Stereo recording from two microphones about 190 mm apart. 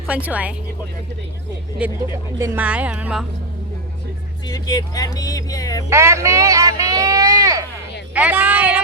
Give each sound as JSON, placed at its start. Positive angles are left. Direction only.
{"t": 0.1, "sound": "speech", "side_deg": -5}
{"t": 1.8, "sound": "speech", "side_deg": -5}
{"t": 4.4, "sound": "speech", "side_deg": 20}
{"t": 5.9, "sound": "a sound", "side_deg": -15}
{"t": 8.1, "sound": "speech", "side_deg": -10}